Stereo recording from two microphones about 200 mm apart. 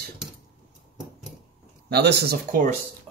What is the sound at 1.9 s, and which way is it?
Speech, 55° right (ahead or behind).